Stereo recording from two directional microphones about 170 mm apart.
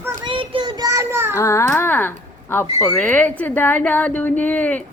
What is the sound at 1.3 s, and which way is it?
Speech, 15° left (ahead or behind).